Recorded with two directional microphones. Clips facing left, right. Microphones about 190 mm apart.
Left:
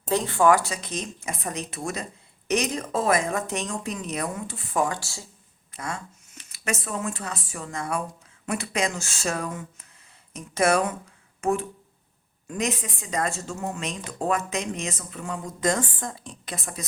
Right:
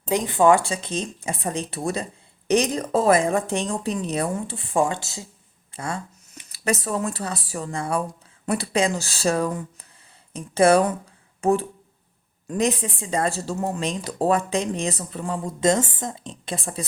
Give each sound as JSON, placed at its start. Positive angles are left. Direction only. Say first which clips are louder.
{"t": 0.1, "sound": "speech", "louder": "right 2 dB", "side_deg": -15}
{"t": 5.7, "sound": "speech", "louder": "right 4 dB", "side_deg": -30}